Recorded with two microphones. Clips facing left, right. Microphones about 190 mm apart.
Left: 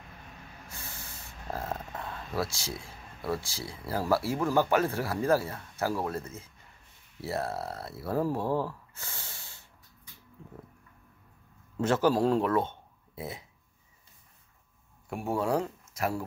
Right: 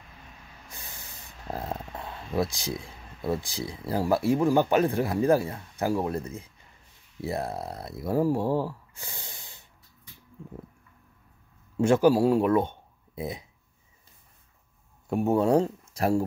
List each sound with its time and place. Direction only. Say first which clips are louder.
0.7 s speech: even; 15° right (ahead or behind)
11.7 s speech: right 5 dB; 15° right (ahead or behind)
15.0 s speech: right 7 dB; 25° right (ahead or behind)